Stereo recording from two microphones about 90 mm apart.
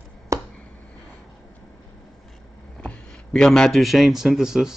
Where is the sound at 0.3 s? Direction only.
35° right (ahead or behind).